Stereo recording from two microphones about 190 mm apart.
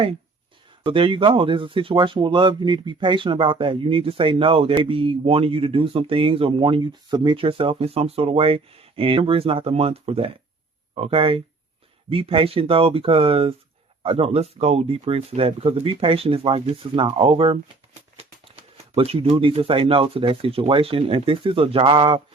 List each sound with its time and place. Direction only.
0.9 s speech: 25° right (ahead or behind)
18.9 s speech: 30° right (ahead or behind)